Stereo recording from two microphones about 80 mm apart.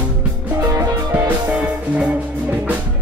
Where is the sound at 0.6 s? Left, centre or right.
Right.